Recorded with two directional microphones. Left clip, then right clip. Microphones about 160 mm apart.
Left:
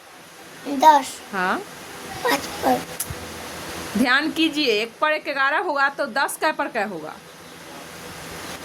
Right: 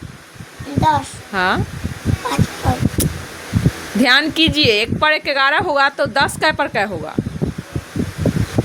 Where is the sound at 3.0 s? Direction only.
30° right (ahead or behind).